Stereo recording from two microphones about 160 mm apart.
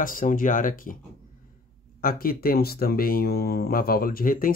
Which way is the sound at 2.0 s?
65° left (ahead or behind).